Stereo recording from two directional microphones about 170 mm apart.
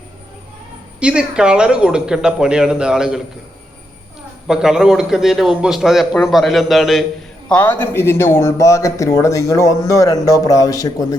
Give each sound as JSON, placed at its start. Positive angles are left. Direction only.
{"t": 0.9, "sound": "a man's voice", "side_deg": -5}
{"t": 4.4, "sound": "a man's voice", "side_deg": -5}